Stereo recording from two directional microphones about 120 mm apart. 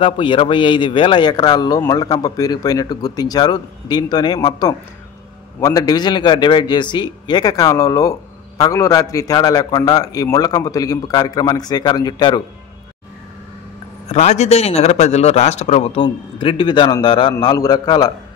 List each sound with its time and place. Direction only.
0.0 s a man's voice: 45° left (ahead or behind)
14.0 s a man's voice: 70° left (ahead or behind)
16.0 s a man's voice: 45° left (ahead or behind)